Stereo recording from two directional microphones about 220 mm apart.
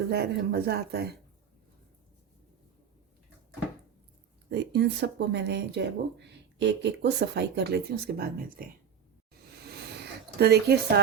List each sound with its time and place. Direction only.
0.1 s speech: 45° right (ahead or behind)
4.4 s speech: 50° right (ahead or behind)
10.3 s speech: 45° right (ahead or behind)